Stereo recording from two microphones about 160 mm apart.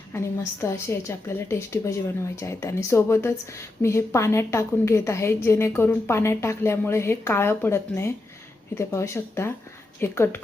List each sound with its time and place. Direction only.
0.1 s a woman's voice: 15° left (ahead or behind)